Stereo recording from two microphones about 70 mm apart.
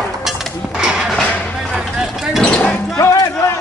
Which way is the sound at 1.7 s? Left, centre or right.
Centre.